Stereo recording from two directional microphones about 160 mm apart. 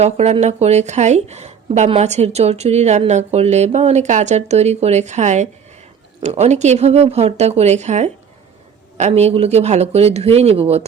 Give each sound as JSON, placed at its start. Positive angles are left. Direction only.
{"t": 0.0, "sound": "a woman's voice", "side_deg": -40}